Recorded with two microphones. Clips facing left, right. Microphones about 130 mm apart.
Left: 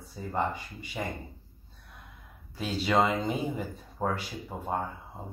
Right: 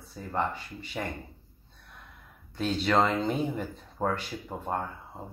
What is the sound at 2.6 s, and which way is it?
Speech, 10° left (ahead or behind).